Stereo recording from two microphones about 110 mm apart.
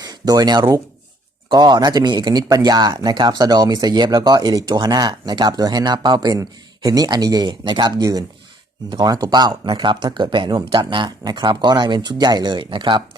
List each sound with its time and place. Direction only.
0.0 s speech: 35° right (ahead or behind)